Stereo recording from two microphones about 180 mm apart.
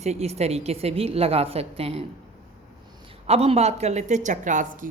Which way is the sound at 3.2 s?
35° right (ahead or behind).